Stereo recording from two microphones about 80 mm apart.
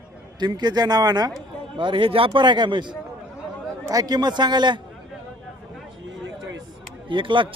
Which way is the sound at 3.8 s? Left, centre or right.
Right.